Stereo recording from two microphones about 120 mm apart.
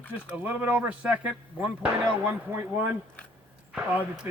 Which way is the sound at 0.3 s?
10° right (ahead or behind).